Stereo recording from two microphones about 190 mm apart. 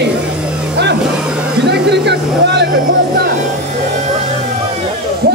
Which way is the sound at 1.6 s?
60° right (ahead or behind).